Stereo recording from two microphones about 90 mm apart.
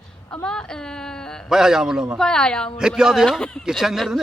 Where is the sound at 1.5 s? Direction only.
5° right (ahead or behind).